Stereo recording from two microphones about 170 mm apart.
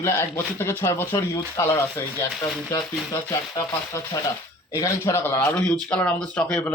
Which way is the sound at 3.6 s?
20° left (ahead or behind).